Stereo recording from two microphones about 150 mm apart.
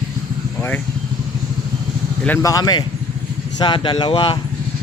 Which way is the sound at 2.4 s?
25° left (ahead or behind).